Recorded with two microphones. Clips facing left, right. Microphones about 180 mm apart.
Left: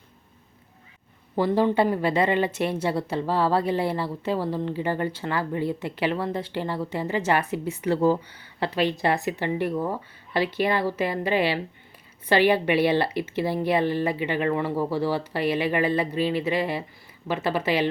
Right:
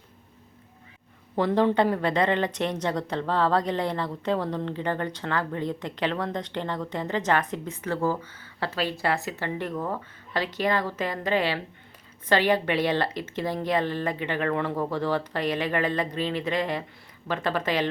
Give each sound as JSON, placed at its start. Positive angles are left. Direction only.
{"t": 1.4, "sound": "speech", "side_deg": 5}